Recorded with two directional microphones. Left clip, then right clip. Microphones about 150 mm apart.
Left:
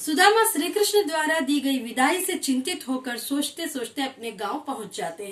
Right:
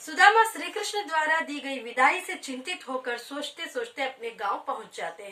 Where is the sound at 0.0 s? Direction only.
15° left (ahead or behind).